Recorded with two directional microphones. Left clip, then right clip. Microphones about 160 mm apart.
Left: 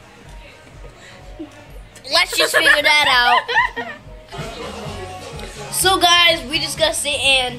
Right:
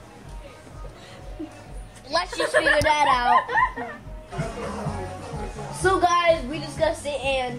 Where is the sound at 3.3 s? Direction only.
45° left (ahead or behind).